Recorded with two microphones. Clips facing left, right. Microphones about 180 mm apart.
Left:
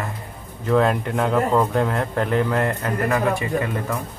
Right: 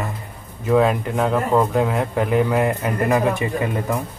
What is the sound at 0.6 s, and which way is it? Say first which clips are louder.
Speech: right 2 dB; 5° right (ahead or behind).